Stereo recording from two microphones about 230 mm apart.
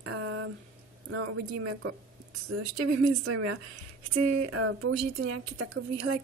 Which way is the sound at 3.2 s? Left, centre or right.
Right.